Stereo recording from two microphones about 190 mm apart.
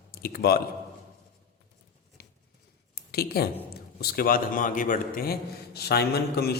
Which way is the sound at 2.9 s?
55° left (ahead or behind).